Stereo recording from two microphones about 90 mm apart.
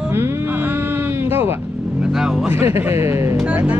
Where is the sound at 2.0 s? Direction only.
5° right (ahead or behind).